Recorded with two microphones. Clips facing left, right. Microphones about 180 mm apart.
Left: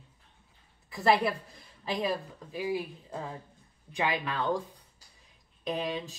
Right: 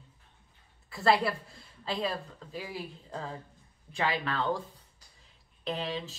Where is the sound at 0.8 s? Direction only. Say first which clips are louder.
Left 1 dB; 15° left (ahead or behind).